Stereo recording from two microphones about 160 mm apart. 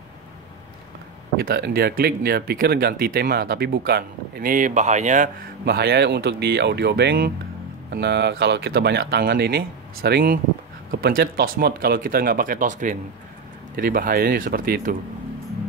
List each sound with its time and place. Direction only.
1.4 s speech: 80° right; by 5.3 s 50° right (ahead or behind)
5.7 s speech: 90° right; by 12.9 s 50° right (ahead or behind)
13.7 s speech: 60° right (ahead or behind)